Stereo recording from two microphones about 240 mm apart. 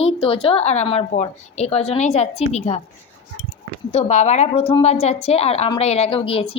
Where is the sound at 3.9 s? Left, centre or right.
Left.